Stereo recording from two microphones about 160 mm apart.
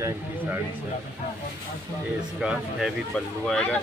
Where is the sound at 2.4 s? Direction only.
Centre (ahead or behind).